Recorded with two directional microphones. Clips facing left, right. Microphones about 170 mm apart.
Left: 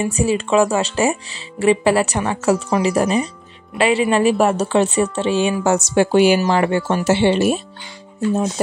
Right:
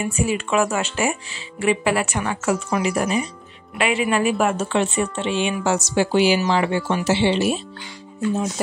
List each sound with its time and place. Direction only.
0.0 s a woman's voice: 35° left (ahead or behind)
8.2 s speech: 30° left (ahead or behind)